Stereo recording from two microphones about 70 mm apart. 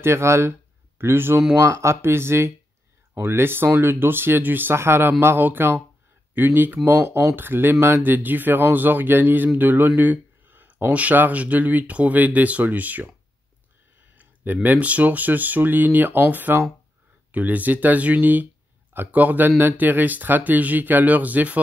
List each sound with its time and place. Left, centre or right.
0.0 s speech: right
1.6 s speech: right
14.1 s speech: right